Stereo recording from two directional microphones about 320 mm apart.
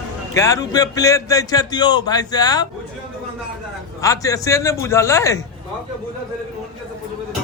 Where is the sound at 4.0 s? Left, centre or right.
Centre.